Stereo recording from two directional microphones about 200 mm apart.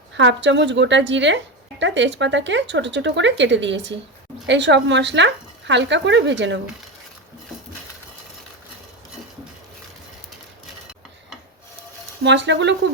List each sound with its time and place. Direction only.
0.1 s speech: 65° right (ahead or behind)
12.2 s speech: 65° right (ahead or behind)